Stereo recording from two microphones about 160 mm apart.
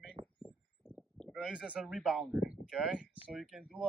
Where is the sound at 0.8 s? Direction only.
5° left (ahead or behind).